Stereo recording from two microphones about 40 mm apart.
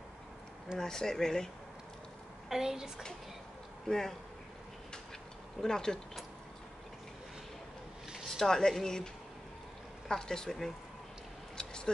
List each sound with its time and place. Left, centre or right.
0.7 s a woman's voice: centre
2.5 s a child's voice: centre
3.8 s speech: centre
5.6 s a woman's voice: centre
8.3 s a woman's voice: centre
11.5 s a sound: centre